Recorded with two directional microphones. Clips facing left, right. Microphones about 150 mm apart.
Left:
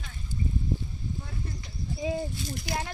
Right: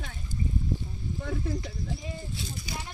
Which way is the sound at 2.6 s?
90° left.